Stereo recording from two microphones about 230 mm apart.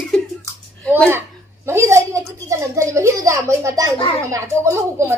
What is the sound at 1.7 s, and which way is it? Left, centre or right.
A woman's voice, centre.